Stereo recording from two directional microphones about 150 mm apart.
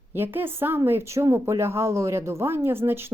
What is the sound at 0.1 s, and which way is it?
A woman's voice, 15° right (ahead or behind).